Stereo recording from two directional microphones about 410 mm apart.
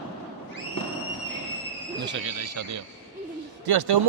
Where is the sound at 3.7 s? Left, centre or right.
Right.